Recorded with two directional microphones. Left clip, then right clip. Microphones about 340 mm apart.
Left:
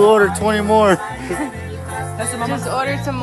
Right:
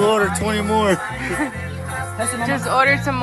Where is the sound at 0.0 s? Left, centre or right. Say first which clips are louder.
Left 5 dB; left.